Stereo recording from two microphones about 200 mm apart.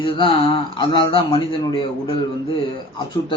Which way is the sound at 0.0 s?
25° left (ahead or behind).